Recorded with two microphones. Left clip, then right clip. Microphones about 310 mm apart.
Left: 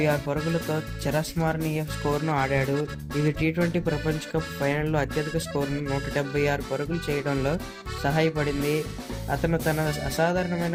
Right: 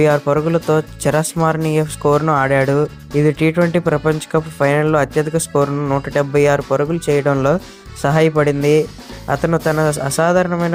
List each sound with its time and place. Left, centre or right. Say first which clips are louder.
0.0 s speech: right 12 dB; centre